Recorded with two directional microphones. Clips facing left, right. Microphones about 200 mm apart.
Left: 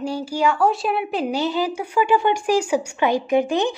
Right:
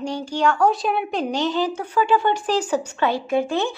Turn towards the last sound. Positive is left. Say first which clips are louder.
# left 2 dB
turn(degrees=15)  # may be behind; listen again after turning